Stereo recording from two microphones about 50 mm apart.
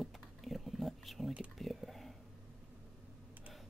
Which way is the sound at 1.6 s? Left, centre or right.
Centre.